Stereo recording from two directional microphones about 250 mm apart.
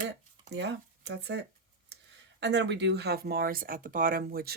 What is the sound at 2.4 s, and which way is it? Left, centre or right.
Speech, right.